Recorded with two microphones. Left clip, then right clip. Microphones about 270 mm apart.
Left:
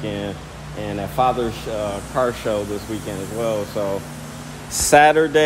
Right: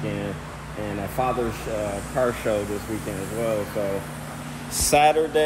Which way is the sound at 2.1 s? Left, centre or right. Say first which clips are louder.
Left 2 dB; centre.